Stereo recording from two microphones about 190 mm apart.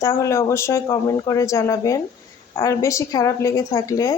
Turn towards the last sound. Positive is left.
turn(degrees=15)  # may be behind; listen again after turning